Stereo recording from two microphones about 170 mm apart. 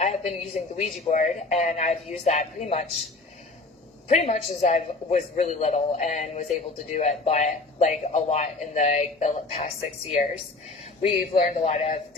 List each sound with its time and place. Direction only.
0.0 s a man's voice: 40° left (ahead or behind)
4.1 s a man's voice: 40° left (ahead or behind)